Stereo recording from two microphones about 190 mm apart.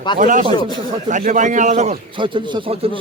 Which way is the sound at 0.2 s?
45° right (ahead or behind).